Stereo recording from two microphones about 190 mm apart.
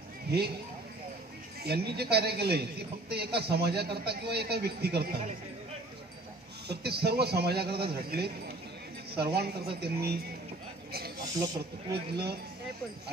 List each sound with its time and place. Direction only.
0.3 s a sound: 55° right (ahead or behind)
1.6 s a woman's voice: 55° right (ahead or behind)
6.7 s a woman's voice: 60° right (ahead or behind)
11.9 s a woman's voice: 55° right (ahead or behind)